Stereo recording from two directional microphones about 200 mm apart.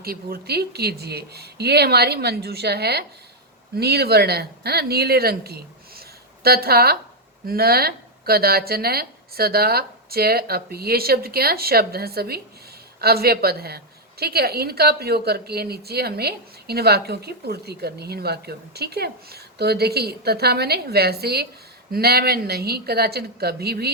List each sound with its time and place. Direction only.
0.0 s a woman's voice: 50° right (ahead or behind)